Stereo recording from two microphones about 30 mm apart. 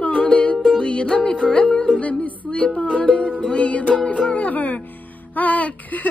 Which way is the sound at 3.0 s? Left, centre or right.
Left.